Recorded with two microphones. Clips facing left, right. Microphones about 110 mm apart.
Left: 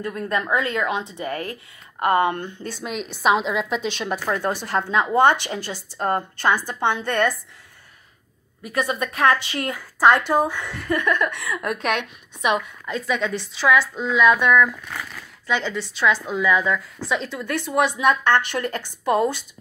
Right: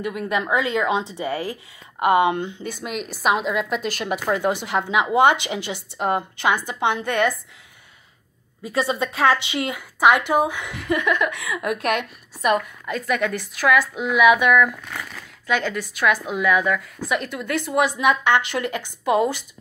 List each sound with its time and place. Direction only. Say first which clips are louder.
0.0 s speech: right 1 dB; 15° right (ahead or behind)
1.5 s speech: right 2 dB; 15° right (ahead or behind)
2.8 s speech: left 1 dB; centre (ahead or behind)
8.7 s speech: right 1 dB; 25° right (ahead or behind); by 12.5 s centre (ahead or behind)
12.9 s a woman's voice: right 1 dB; 60° right (ahead or behind)
13.3 s speech: left 2 dB; 10° right (ahead or behind)